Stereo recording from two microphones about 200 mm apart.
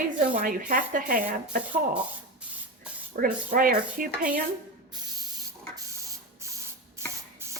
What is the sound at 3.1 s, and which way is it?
A woman's voice, 45° right (ahead or behind).